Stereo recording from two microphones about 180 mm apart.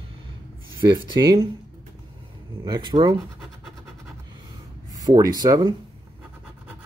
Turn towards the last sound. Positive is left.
turn(degrees=-20)  # may be behind; listen again after turning